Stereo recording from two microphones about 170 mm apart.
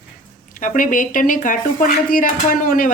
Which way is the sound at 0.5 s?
50° left (ahead or behind).